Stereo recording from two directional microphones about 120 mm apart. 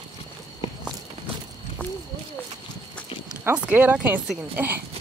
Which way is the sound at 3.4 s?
15° right (ahead or behind).